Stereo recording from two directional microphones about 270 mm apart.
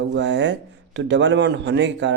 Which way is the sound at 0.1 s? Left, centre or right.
Right.